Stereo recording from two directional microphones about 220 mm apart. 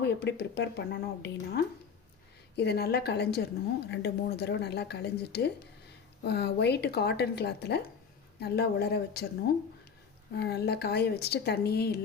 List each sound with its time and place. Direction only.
0.0 s speech: 45° left (ahead or behind)
10.3 s speech: 50° left (ahead or behind)